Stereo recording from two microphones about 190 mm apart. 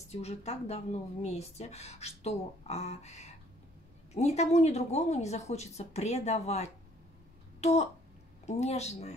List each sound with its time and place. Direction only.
0.1 s a woman's voice: 35° left (ahead or behind)